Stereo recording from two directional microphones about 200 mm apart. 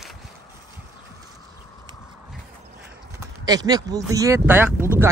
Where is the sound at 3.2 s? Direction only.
20° right (ahead or behind).